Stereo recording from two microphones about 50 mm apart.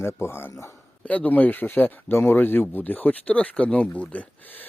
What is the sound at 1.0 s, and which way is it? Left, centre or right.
Speech, left.